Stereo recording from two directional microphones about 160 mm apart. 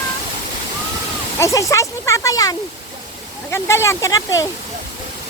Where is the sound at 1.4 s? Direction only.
20° left (ahead or behind).